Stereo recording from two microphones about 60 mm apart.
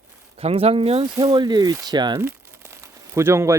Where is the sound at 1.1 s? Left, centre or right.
Right.